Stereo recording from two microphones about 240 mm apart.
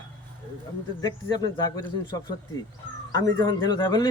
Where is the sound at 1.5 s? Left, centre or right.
Centre.